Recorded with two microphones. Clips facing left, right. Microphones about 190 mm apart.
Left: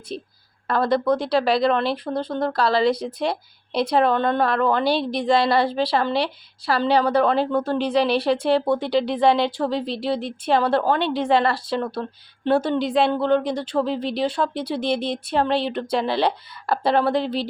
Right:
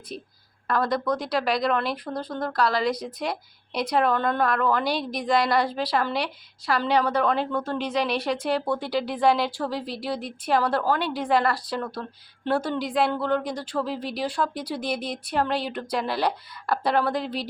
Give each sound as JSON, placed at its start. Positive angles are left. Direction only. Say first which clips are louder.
{"t": 0.1, "sound": "speech", "louder": "left 6 dB", "side_deg": 30}